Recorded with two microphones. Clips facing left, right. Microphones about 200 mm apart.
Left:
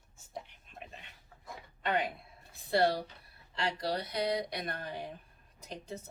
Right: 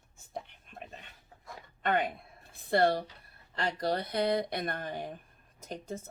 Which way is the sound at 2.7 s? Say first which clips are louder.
Right 2 dB; 50° right (ahead or behind).